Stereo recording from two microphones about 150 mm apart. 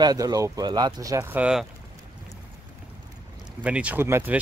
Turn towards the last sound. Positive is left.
turn(degrees=-15)  # may be behind; listen again after turning